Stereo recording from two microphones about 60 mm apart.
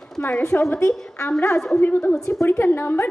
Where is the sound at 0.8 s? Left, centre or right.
Left.